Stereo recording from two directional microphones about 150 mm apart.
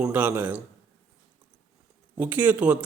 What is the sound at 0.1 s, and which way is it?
Speech, 15° right (ahead or behind).